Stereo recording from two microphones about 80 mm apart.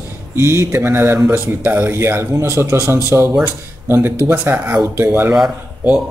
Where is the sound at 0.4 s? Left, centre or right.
Right.